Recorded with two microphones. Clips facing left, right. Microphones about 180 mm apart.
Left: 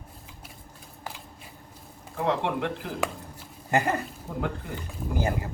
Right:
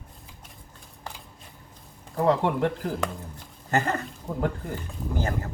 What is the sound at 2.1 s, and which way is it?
Speech, 40° right (ahead or behind).